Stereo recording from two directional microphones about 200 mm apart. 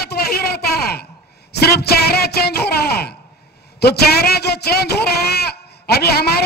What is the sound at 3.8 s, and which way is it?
Speech, 55° left (ahead or behind).